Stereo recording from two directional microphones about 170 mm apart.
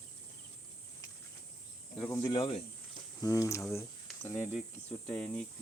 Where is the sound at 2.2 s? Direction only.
30° left (ahead or behind).